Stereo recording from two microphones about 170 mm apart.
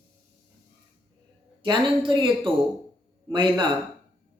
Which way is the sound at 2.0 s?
30° right (ahead or behind).